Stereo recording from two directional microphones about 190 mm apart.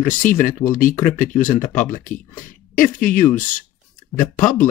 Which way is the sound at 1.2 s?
45° left (ahead or behind).